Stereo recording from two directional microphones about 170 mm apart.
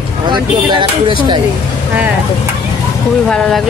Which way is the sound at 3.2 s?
5° left (ahead or behind).